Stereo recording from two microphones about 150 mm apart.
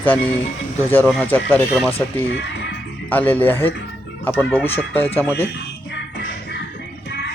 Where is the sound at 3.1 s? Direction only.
10° left (ahead or behind).